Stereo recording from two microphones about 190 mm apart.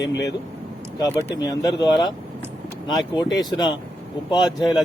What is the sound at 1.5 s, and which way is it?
Speech, 20° left (ahead or behind).